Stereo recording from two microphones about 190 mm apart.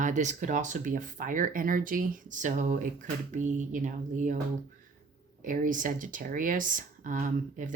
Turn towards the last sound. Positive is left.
turn(degrees=-45)  # may be behind; listen again after turning